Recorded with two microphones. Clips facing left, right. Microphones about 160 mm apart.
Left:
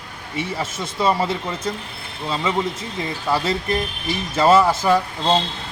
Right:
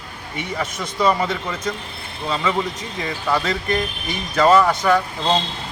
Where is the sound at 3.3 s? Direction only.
30° left (ahead or behind).